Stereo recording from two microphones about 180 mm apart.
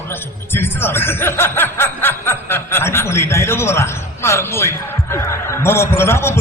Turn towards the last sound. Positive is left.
turn(degrees=15)  # may be behind; listen again after turning